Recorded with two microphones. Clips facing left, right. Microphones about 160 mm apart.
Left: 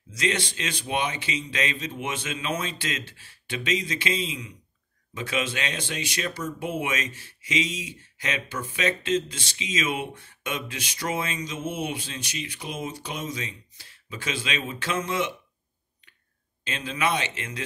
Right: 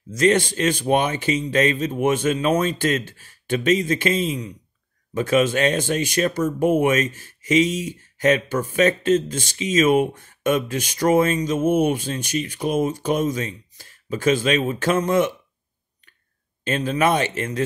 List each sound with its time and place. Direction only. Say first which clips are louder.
0.1 s speech: right 10 dB; 45° right (ahead or behind)
16.6 s speech: right 8 dB; 45° right (ahead or behind)